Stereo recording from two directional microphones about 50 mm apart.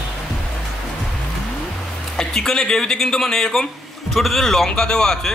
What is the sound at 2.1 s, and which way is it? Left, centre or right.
A man's voice, centre.